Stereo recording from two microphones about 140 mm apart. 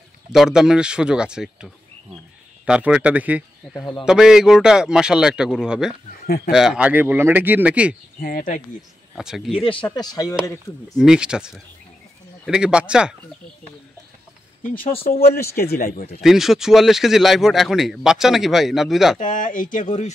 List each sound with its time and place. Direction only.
0.3 s speech: 5° right (ahead or behind)
3.7 s a man's voice: 30° left (ahead or behind)
4.0 s speech: 5° right (ahead or behind)
6.2 s speech: 90° left
6.5 s speech: 5° right (ahead or behind)
8.2 s speech: 90° left
9.1 s speech: centre (ahead or behind)
9.5 s speech: 40° left (ahead or behind); by 11.0 s 25° left (ahead or behind)
11.0 s speech: 5° right (ahead or behind)
14.6 s speech: 90° left
16.2 s speech: centre (ahead or behind)
19.1 s speech: 70° left (ahead or behind)